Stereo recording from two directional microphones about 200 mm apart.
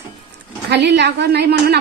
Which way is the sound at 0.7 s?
60° right (ahead or behind).